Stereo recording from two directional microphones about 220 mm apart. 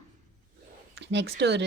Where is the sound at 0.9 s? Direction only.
50° right (ahead or behind).